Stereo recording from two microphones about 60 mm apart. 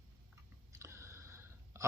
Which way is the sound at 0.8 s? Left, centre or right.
Right.